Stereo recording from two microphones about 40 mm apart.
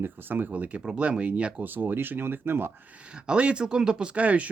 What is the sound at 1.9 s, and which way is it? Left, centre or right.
Speech, right.